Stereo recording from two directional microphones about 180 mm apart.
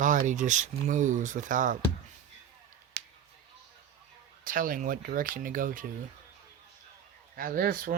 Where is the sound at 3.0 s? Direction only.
65° right (ahead or behind).